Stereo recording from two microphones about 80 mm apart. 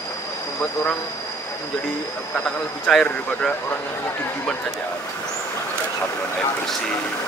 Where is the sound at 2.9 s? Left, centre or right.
Centre.